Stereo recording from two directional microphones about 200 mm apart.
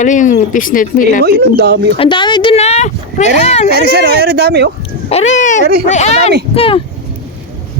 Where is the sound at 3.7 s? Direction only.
50° right (ahead or behind).